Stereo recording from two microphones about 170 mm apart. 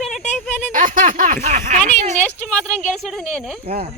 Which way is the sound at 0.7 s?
50° right (ahead or behind).